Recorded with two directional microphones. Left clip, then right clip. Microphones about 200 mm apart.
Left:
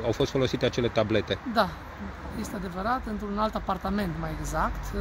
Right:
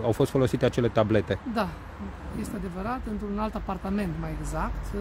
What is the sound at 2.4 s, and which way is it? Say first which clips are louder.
Speech: left 3 dB; 5° right (ahead or behind).